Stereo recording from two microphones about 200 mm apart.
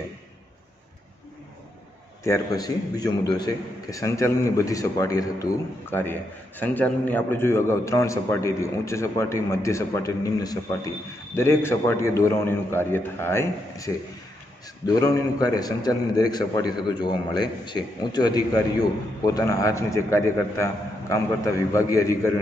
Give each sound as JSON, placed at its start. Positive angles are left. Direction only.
{"t": 2.2, "sound": "a man's voice", "side_deg": 15}
{"t": 15.0, "sound": "a man's voice", "side_deg": 20}